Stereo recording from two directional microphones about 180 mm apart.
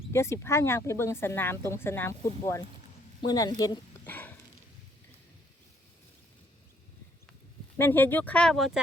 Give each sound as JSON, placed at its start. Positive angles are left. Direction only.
{"t": 0.1, "sound": "speech", "side_deg": 15}
{"t": 4.0, "sound": "a sound", "side_deg": 10}
{"t": 7.8, "sound": "speech", "side_deg": 10}